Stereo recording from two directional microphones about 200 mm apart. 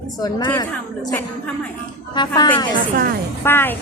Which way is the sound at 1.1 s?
5° left (ahead or behind).